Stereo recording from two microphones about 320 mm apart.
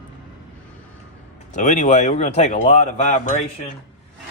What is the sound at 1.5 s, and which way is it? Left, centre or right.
Speech, left.